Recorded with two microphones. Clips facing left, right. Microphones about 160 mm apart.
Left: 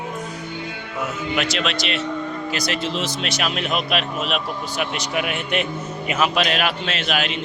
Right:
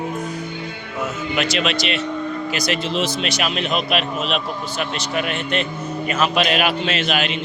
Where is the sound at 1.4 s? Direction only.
Centre (ahead or behind).